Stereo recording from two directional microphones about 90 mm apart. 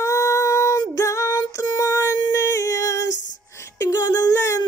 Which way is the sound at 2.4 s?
30° left (ahead or behind).